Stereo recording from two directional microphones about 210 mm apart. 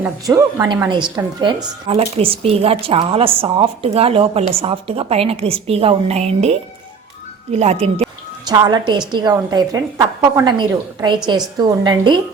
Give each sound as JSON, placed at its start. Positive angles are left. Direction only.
{"t": 0.0, "sound": "a woman's voice", "side_deg": -15}